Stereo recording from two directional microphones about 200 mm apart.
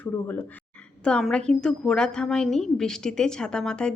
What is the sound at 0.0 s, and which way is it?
A woman's voice, 10° left (ahead or behind).